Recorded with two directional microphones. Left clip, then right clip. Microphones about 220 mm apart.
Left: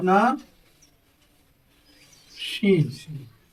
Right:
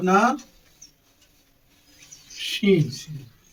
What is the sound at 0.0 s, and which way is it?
Speech, 5° left (ahead or behind).